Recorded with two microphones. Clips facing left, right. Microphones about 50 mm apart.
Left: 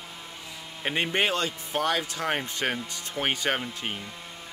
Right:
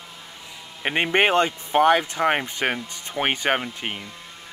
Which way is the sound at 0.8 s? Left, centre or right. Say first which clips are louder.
Right 6 dB; right.